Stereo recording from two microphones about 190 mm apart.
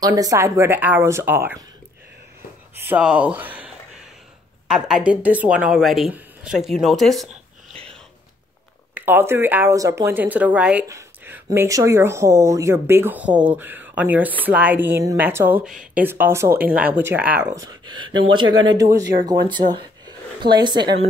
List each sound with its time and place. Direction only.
0.0 s speech: 20° right (ahead or behind)
2.7 s speech: 10° right (ahead or behind)
8.9 s speech: 10° right (ahead or behind)